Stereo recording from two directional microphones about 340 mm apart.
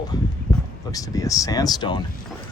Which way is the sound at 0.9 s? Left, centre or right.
Centre.